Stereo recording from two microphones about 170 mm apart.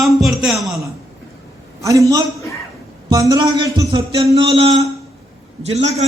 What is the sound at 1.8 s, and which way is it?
A man's voice, 20° right (ahead or behind).